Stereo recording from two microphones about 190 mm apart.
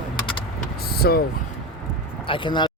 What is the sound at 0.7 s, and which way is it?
Speech, 55° left (ahead or behind).